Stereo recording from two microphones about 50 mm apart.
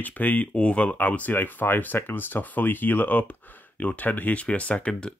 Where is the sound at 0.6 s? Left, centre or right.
Left.